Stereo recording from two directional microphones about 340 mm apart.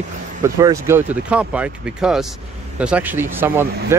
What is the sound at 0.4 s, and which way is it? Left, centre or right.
Speech, centre.